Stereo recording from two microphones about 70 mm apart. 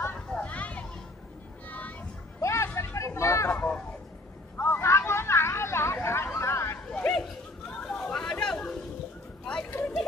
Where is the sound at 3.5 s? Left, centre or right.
Centre.